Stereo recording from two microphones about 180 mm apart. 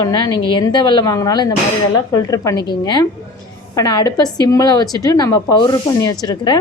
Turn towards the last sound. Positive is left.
turn(degrees=25)  # may be behind; listen again after turning